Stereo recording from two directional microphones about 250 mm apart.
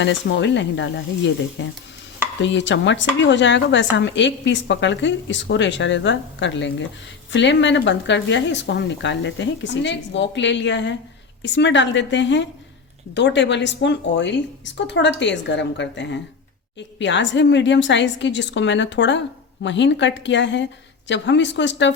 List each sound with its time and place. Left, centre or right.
0.0 s speech: left
2.4 s speech: left